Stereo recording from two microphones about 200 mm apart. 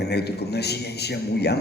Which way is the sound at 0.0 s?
55° left (ahead or behind).